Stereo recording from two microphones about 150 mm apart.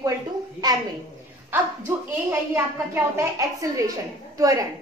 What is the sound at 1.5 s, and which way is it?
A woman's voice, 15° right (ahead or behind).